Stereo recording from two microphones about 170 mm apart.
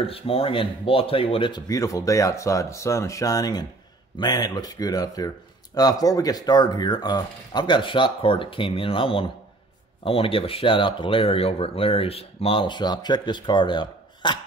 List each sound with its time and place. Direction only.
0.0 s speech: 35° left (ahead or behind)